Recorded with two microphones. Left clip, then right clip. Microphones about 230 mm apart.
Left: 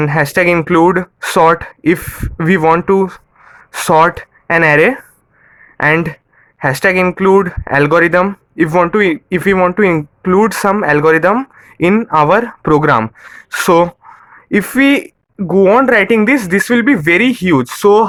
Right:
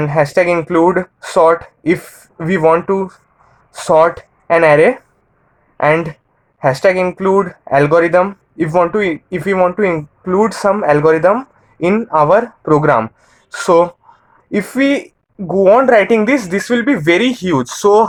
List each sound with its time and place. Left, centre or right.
0.0 s speech: left